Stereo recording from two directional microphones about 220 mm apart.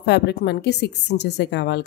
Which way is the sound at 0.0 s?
45° left (ahead or behind).